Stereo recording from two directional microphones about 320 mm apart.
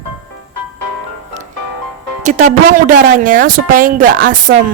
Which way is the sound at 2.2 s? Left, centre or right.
Right.